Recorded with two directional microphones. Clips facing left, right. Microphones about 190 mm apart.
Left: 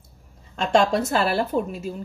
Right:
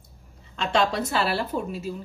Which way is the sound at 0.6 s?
45° left (ahead or behind).